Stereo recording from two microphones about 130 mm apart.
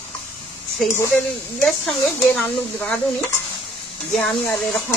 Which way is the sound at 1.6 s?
5° left (ahead or behind).